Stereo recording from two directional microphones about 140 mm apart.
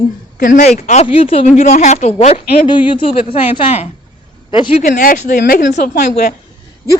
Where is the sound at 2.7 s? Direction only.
35° left (ahead or behind).